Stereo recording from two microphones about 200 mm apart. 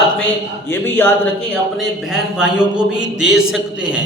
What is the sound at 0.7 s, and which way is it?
Speech, 10° left (ahead or behind).